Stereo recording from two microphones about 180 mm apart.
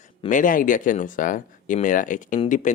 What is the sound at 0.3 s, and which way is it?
Speech, 45° left (ahead or behind).